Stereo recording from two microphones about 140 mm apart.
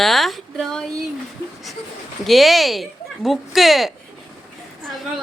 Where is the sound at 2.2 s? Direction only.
Centre (ahead or behind).